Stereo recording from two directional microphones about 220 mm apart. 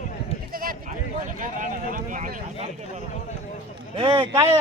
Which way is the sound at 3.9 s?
20° right (ahead or behind).